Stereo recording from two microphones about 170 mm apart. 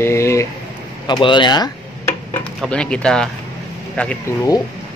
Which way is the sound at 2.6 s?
5° left (ahead or behind).